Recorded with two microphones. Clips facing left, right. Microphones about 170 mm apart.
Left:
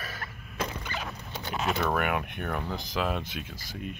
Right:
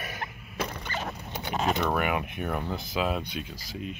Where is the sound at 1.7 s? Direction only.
5° right (ahead or behind).